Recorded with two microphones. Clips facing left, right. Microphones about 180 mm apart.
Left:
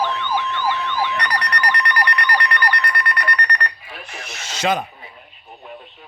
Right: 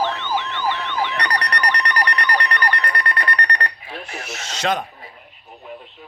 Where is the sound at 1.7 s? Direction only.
35° right (ahead or behind).